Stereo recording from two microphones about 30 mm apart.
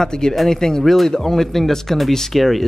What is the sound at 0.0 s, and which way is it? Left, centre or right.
Speech, centre.